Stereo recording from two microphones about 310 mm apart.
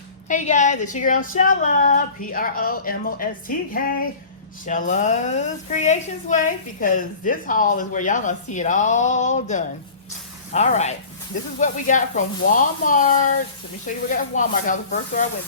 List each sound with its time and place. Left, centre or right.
0.3 s a woman's voice: left